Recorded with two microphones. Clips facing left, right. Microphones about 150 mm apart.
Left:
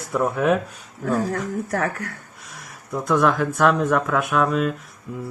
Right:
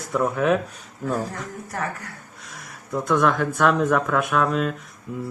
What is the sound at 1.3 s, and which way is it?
Speech, 65° left (ahead or behind).